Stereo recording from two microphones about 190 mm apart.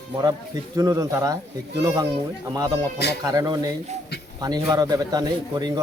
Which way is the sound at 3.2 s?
20° right (ahead or behind).